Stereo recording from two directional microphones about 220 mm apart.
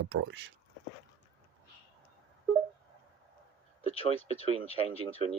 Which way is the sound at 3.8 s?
25° left (ahead or behind).